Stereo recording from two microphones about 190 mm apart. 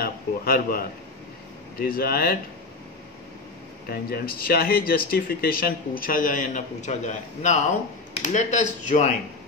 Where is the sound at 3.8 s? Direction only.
50° left (ahead or behind).